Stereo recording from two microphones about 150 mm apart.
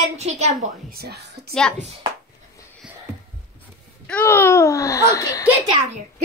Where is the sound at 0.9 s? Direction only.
90° right.